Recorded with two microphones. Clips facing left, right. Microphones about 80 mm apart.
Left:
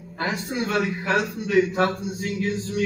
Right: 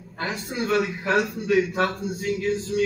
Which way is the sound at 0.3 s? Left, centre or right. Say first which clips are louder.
Right 1 dB; centre.